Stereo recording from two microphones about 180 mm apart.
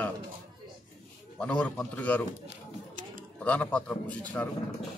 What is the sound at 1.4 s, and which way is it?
Speech, 5° left (ahead or behind).